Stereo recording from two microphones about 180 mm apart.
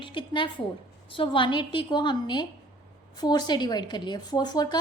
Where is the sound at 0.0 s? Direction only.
25° left (ahead or behind).